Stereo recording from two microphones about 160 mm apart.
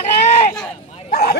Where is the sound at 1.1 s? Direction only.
70° left (ahead or behind).